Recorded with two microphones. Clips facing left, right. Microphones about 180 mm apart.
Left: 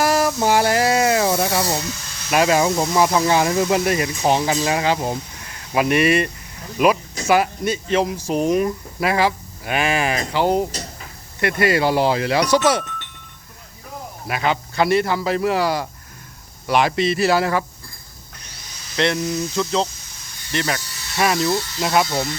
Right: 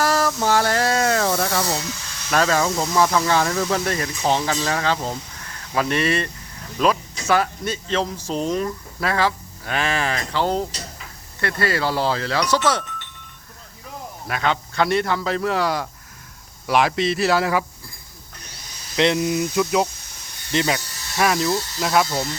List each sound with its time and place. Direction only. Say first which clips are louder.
0.0 s hiss: left 2 dB; 15° left (ahead or behind)
2.3 s speech: left 3 dB; 15° left (ahead or behind)
14.3 s speech: left 2 dB; 5° left (ahead or behind)
18.9 s speech: right 2 dB; 15° right (ahead or behind)
21.2 s speech: left 1 dB; 5° left (ahead or behind)